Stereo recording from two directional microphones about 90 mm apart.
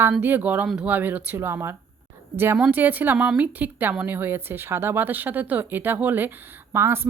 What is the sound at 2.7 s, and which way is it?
Speech, 20° right (ahead or behind).